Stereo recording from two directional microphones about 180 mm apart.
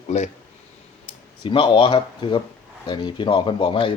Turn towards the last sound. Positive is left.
turn(degrees=30)  # may be behind; listen again after turning